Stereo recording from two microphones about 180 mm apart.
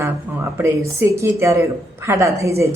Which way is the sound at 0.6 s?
15° right (ahead or behind).